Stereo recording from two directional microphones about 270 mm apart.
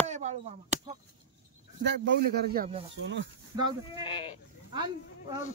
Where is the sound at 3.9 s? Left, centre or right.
Centre.